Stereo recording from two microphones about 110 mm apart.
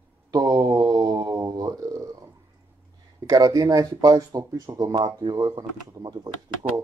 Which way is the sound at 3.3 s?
35° right (ahead or behind).